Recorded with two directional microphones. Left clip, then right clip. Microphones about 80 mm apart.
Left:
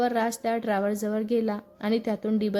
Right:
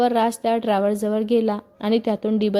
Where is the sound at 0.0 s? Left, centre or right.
Centre.